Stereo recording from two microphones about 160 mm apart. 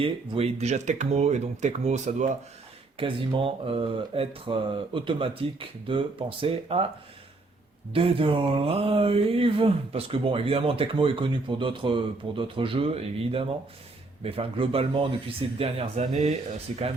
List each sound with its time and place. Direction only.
0.0 s speech: 40° right (ahead or behind)
3.0 s speech: 35° right (ahead or behind)
7.9 s speech: 35° right (ahead or behind)